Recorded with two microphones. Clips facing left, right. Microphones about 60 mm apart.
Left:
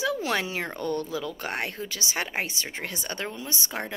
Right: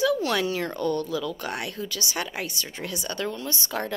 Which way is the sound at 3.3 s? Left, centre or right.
Centre.